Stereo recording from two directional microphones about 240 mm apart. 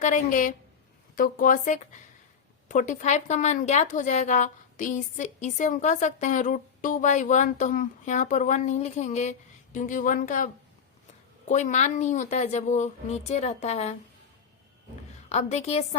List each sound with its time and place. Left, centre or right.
0.0 s a woman's voice: left
15.3 s speech: left